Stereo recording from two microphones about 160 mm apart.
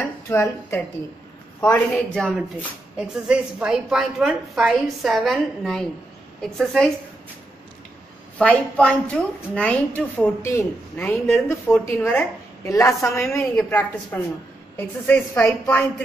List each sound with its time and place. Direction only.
0.3 s a woman's voice: 15° left (ahead or behind)
8.4 s a woman's voice: 5° left (ahead or behind)